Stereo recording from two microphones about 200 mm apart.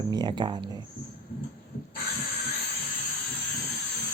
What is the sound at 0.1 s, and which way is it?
Speech, 20° right (ahead or behind).